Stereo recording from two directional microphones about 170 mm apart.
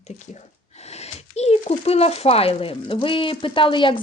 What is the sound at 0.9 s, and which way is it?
Speech, 40° left (ahead or behind).